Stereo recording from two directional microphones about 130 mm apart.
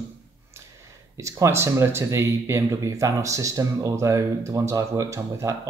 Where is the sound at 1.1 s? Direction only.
25° right (ahead or behind).